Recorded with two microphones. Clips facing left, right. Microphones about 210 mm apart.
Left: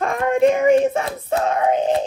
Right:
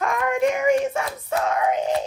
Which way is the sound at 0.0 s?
25° left (ahead or behind).